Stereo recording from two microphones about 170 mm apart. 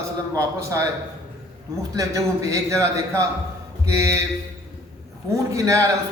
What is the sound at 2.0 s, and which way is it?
A man's voice, 20° right (ahead or behind).